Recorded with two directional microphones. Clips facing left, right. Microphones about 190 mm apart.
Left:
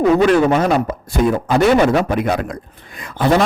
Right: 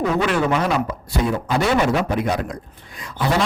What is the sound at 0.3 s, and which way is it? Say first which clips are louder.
A man's voice: left 6 dB; 40° left (ahead or behind).